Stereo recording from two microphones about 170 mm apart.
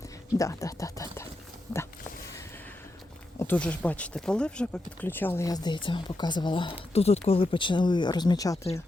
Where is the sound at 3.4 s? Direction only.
10° left (ahead or behind).